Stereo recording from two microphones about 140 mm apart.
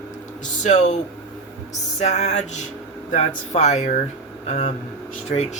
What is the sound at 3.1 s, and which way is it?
Speech, 55° left (ahead or behind).